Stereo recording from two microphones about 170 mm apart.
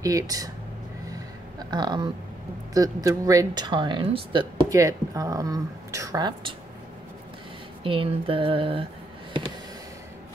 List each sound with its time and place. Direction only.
0.0 s speech: 20° right (ahead or behind)
1.7 s speech: 25° right (ahead or behind)
7.8 s speech: 30° right (ahead or behind)